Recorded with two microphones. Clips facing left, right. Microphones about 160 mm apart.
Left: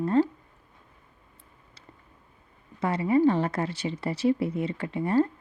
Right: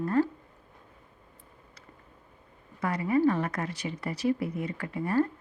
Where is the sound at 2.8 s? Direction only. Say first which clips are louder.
Left 3 dB; 25° left (ahead or behind).